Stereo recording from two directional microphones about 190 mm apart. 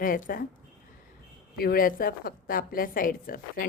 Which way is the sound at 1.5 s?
50° left (ahead or behind).